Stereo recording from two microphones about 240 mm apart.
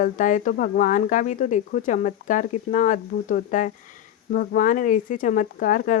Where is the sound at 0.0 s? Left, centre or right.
Left.